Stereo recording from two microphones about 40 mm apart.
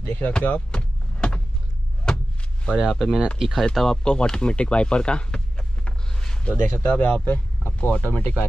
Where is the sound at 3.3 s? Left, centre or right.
Centre.